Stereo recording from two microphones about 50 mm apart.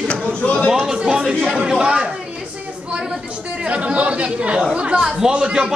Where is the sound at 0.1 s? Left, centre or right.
Left.